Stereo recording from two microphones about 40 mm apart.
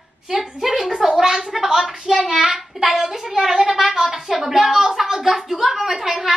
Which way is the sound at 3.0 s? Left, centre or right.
Centre.